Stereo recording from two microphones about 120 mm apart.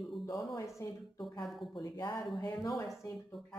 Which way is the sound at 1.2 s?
Centre (ahead or behind).